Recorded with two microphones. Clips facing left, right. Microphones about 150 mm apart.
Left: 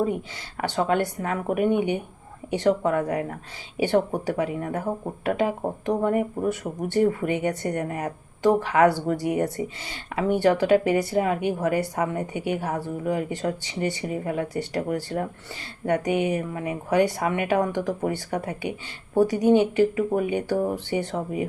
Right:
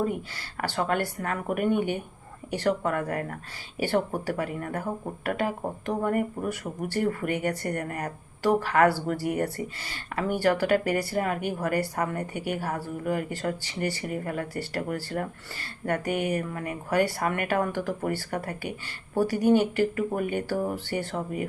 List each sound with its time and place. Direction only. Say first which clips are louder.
0.6 s speech: left 4 dB; 20° left (ahead or behind)